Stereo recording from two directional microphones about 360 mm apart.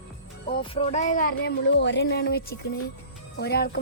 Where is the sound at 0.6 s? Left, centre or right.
Centre.